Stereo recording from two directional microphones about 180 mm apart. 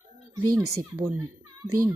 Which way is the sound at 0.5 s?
20° right (ahead or behind).